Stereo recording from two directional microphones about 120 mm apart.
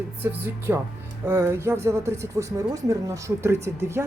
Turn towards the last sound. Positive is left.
turn(degrees=-25)  # may be behind; listen again after turning